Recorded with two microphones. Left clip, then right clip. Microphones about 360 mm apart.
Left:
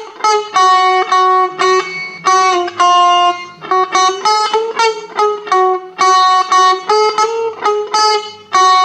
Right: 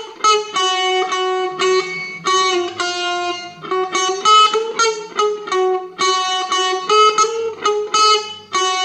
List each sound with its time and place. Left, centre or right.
0.2 s music: centre